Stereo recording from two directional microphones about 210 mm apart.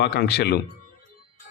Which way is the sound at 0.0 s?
50° left (ahead or behind).